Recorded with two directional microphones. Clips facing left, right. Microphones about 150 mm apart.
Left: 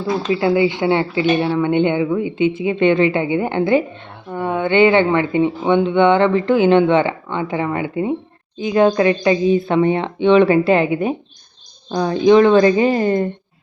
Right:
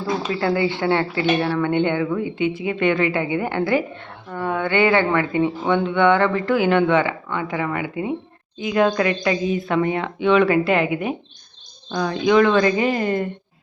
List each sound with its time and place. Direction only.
0.3 s a woman's voice: 15° left (ahead or behind)